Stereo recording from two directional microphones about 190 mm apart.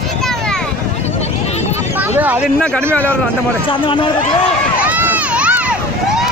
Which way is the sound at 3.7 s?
25° left (ahead or behind).